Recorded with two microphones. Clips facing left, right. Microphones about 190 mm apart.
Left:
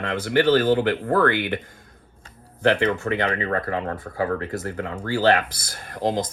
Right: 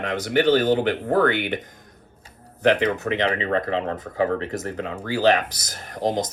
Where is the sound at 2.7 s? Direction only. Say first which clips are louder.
Even; 20° right (ahead or behind).